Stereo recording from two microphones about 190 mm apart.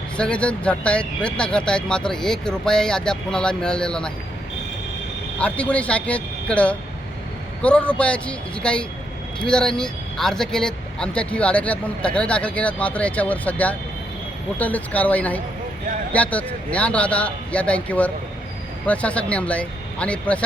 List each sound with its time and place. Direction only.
0.2 s speech: 5° left (ahead or behind)
5.4 s speech: 5° left (ahead or behind)